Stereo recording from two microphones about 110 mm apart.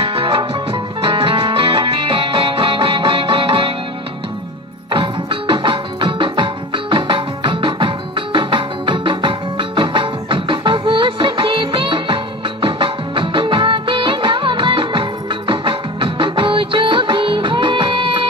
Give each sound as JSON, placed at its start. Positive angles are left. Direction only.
{"t": 0.0, "sound": "music", "side_deg": -55}
{"t": 4.9, "sound": "music", "side_deg": -50}